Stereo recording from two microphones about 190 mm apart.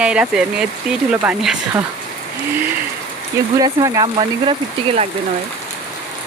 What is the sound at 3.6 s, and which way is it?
Speech, 20° right (ahead or behind).